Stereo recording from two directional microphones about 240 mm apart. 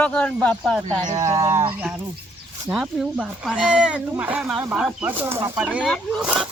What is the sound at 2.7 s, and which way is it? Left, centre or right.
Speech, centre.